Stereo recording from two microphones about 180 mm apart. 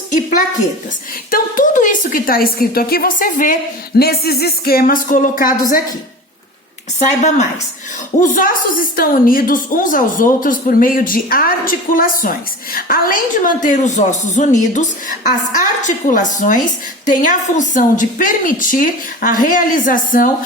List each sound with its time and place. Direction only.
1.3 s a woman's voice: 50° left (ahead or behind)
7.0 s a woman's voice: 40° left (ahead or behind)